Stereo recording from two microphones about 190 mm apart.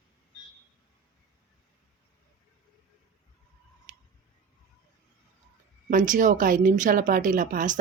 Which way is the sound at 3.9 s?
40° right (ahead or behind).